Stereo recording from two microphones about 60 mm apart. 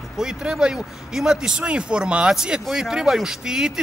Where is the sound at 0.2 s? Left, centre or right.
Centre.